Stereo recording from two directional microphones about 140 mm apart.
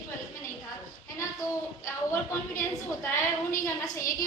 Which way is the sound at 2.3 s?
15° left (ahead or behind).